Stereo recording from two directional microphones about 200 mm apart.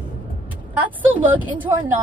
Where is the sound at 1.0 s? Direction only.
10° right (ahead or behind).